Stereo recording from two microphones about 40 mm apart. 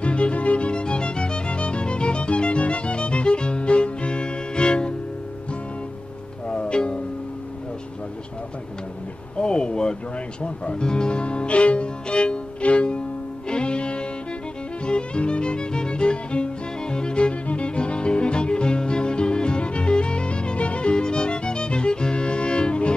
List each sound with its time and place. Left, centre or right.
0.0 s music: left
6.4 s music: left
9.4 s a sound: left
10.4 s music: left